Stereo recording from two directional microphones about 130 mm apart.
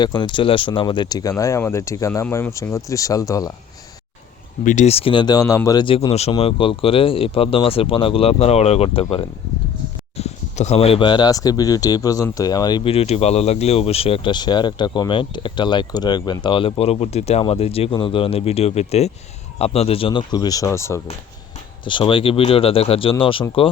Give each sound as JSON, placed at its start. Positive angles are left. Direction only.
{"t": 0.0, "sound": "speech", "side_deg": 35}
{"t": 4.6, "sound": "speech", "side_deg": 75}
{"t": 4.9, "sound": "speech", "side_deg": 45}
{"t": 5.8, "sound": "a man's voice", "side_deg": 45}
{"t": 10.2, "sound": "speech", "side_deg": 55}
{"t": 12.8, "sound": "a man's voice", "side_deg": 50}
{"t": 21.8, "sound": "a man's voice", "side_deg": 40}